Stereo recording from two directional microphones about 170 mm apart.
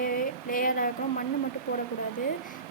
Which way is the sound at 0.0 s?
55° left (ahead or behind).